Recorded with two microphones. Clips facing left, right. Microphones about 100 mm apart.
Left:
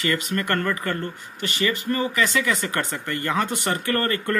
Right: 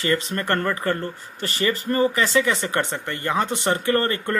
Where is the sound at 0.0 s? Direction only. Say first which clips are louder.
Right 1 dB; 30° right (ahead or behind).